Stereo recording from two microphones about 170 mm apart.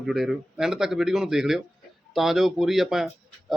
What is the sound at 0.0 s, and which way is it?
Speech, centre (ahead or behind).